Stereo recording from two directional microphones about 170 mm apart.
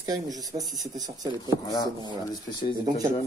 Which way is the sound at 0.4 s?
20° right (ahead or behind).